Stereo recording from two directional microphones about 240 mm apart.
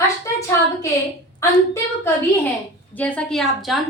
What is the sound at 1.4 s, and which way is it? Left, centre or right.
A woman's voice, centre.